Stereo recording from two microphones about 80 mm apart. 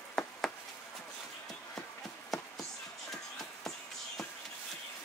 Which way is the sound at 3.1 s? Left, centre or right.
Centre.